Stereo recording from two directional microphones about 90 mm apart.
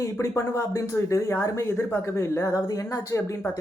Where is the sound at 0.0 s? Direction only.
35° left (ahead or behind).